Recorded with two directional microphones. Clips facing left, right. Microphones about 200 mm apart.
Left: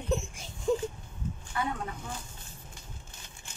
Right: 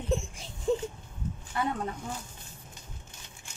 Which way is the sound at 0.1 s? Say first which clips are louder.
Even; centre (ahead or behind).